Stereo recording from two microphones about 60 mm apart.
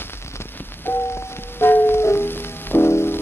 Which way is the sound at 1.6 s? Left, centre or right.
Left.